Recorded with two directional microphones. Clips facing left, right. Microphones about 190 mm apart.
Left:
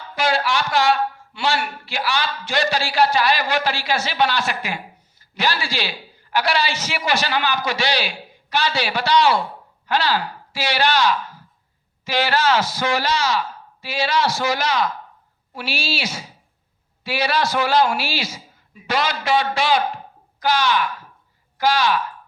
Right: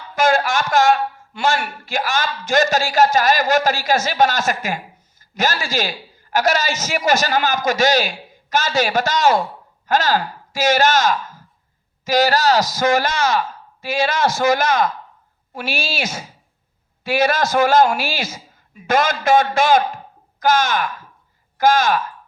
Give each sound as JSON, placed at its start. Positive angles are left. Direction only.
{"t": 0.2, "sound": "a man's voice", "side_deg": -45}